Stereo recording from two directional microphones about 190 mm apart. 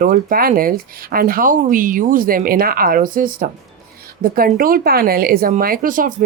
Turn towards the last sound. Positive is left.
turn(degrees=-45)  # may be behind; listen again after turning